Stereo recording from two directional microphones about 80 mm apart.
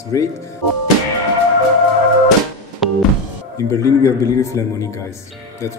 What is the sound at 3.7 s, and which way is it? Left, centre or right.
Speech, left.